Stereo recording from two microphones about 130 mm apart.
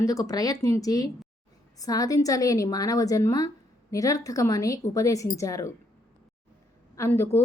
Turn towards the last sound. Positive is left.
turn(degrees=20)  # may be behind; listen again after turning